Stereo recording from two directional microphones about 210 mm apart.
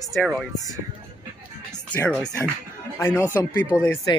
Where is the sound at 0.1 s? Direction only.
Centre (ahead or behind).